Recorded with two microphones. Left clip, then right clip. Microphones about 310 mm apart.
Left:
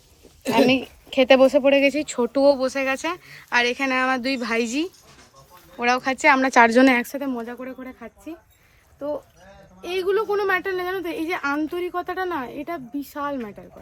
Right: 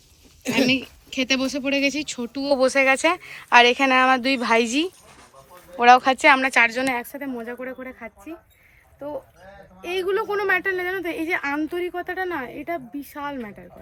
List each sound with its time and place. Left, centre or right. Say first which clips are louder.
0.4 s a sound: left 3 dB; centre
1.6 s speech: left 5 dB; centre; by 7.2 s left
7.2 s speech: left 2 dB; centre
9.9 s speech: left 1 dB; centre